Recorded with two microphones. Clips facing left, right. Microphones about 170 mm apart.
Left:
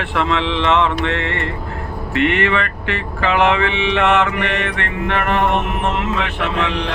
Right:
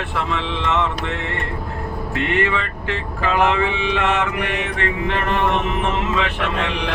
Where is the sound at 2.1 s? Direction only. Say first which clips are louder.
Left 4 dB; 75° left (ahead or behind); by 5.5 s 60° left (ahead or behind).